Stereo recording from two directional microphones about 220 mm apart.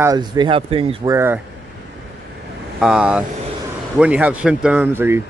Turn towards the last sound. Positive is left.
turn(degrees=-10)  # may be behind; listen again after turning